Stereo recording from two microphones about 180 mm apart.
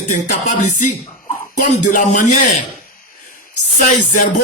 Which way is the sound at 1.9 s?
45° left (ahead or behind).